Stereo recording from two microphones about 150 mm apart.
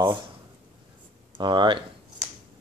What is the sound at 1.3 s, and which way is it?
Speech, 30° right (ahead or behind).